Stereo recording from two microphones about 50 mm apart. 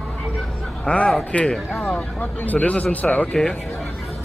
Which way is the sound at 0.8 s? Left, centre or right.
Left.